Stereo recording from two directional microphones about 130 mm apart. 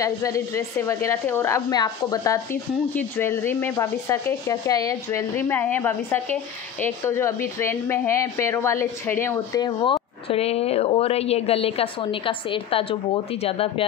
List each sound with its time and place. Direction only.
0.0 s a woman's voice: 25° left (ahead or behind)
1.7 s a woman's voice: 30° left (ahead or behind)
9.6 s a woman's voice: 35° left (ahead or behind)